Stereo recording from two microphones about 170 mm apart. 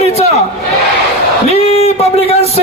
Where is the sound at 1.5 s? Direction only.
40° left (ahead or behind).